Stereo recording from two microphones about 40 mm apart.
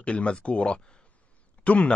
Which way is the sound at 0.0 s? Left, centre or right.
Left.